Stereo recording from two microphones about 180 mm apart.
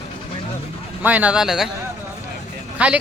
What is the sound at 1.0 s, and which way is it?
Speech, 10° right (ahead or behind).